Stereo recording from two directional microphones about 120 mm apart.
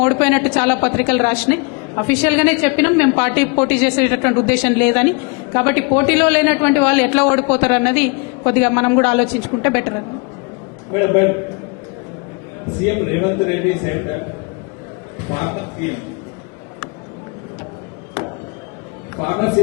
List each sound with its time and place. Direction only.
0.0 s a woman's voice: 15° left (ahead or behind)
12.8 s a man's voice: 20° left (ahead or behind)
15.3 s a man's voice: 20° left (ahead or behind)
19.1 s a man's voice: 20° left (ahead or behind)